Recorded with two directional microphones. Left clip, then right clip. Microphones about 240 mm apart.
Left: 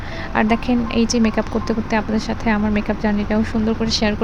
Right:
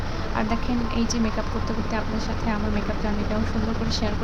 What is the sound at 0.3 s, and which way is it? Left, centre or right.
Speech, left.